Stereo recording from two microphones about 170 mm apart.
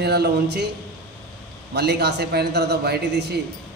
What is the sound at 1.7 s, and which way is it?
A man's voice, 75° right (ahead or behind).